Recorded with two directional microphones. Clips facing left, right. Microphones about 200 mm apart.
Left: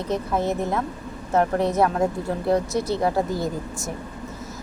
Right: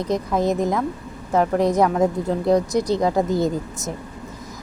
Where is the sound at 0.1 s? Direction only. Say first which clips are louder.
Right 3 dB; 15° right (ahead or behind).